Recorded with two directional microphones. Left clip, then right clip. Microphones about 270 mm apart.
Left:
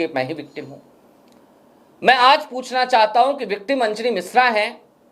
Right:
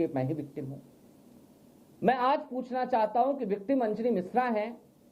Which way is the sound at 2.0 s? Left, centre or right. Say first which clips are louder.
Left 13 dB; centre.